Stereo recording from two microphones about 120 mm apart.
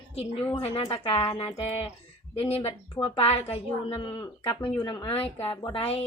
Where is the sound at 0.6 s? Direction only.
50° left (ahead or behind); by 5.0 s 35° left (ahead or behind).